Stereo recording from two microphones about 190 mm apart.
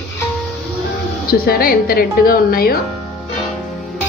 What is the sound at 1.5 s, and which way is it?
A woman's voice, 50° left (ahead or behind).